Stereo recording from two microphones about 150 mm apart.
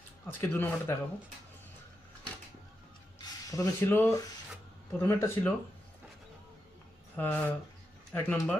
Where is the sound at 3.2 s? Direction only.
20° left (ahead or behind).